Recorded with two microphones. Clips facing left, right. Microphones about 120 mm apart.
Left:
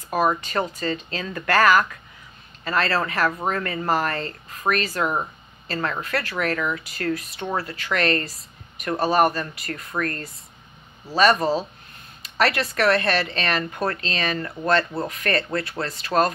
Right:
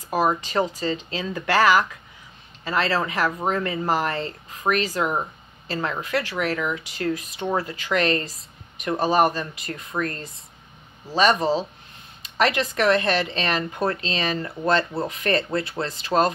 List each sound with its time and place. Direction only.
0.1 s speech: 15° right (ahead or behind)